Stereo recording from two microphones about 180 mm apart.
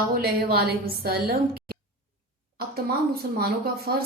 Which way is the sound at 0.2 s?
55° right (ahead or behind).